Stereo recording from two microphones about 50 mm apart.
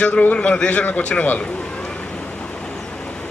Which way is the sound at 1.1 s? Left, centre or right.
Left.